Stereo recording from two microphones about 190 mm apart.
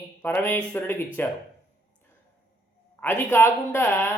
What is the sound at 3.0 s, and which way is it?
Speech, 10° left (ahead or behind).